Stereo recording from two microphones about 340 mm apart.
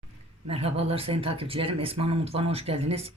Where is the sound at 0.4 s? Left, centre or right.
Centre.